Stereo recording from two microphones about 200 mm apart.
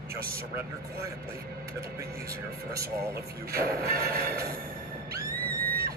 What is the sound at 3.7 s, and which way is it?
Speech, 50° right (ahead or behind).